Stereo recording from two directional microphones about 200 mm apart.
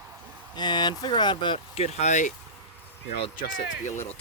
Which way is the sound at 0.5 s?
20° left (ahead or behind).